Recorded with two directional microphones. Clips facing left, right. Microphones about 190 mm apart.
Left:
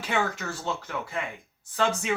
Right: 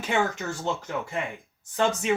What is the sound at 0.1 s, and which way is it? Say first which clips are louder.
Speech: right 2 dB; 20° right (ahead or behind).